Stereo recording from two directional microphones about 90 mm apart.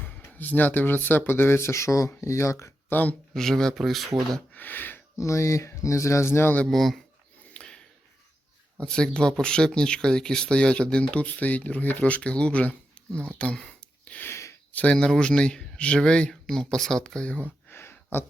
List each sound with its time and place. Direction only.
0.0 s speech: 20° left (ahead or behind)
2.9 s speech: 20° left (ahead or behind)
3.3 s speech: 5° left (ahead or behind)
4.5 s speech: 20° left (ahead or behind)
5.1 s speech: 35° left (ahead or behind)
6.7 s speech: centre (ahead or behind)
7.5 s a sound: 10° left (ahead or behind)
8.8 s speech: 10° left (ahead or behind)
14.3 s a sound: 30° left (ahead or behind)
14.7 s speech: 15° left (ahead or behind)
17.7 s a sound: 25° left (ahead or behind)